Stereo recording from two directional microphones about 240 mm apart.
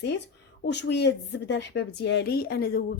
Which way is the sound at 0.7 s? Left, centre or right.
Left.